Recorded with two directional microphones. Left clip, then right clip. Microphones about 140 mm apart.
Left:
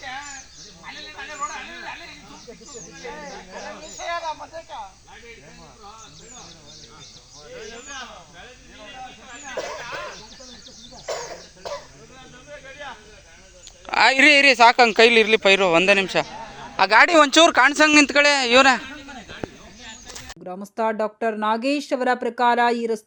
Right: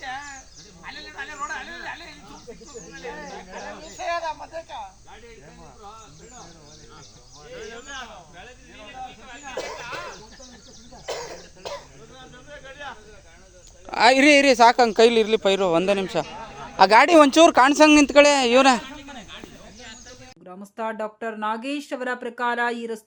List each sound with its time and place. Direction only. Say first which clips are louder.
0.9 s a sound: even; 30° right (ahead or behind)
1.5 s snake: even; 30° right (ahead or behind)
2.7 s a man's voice: even; 25° right (ahead or behind)
3.9 s speech: right 1 dB; 45° right (ahead or behind)
7.5 s a man's voice: even; 30° right (ahead or behind)
9.6 s a sound: left 2 dB; 30° right (ahead or behind)
11.0 s chicken: left 2 dB; 60° right (ahead or behind)
12.5 s snake: left 1 dB; 30° right (ahead or behind)
13.8 s a man's voice: left 1 dB; 5° right (ahead or behind); by 18.9 s 25° right (ahead or behind)
20.4 s speech: left 6 dB; 30° left (ahead or behind)